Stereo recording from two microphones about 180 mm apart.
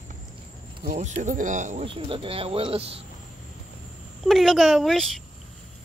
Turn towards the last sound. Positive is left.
turn(degrees=0)  # may be behind; listen again after turning